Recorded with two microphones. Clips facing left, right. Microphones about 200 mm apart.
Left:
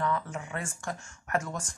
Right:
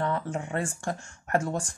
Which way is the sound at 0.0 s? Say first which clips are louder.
Right 2 dB; 30° right (ahead or behind).